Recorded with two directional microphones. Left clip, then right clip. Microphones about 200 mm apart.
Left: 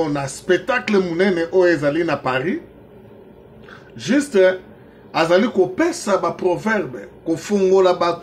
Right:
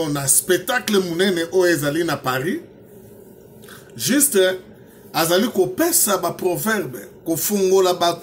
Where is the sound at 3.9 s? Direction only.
30° right (ahead or behind).